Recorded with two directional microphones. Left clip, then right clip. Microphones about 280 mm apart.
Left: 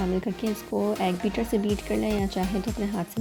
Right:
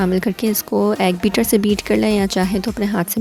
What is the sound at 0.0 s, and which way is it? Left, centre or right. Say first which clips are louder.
Speech: right 9 dB; right.